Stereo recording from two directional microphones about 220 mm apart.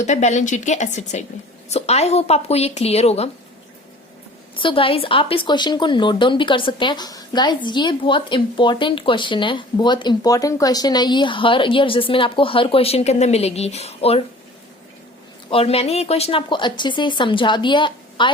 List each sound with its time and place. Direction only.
0.0 s a woman's voice: 30° left (ahead or behind)
4.5 s speech: 25° left (ahead or behind)
15.4 s speech: 25° left (ahead or behind)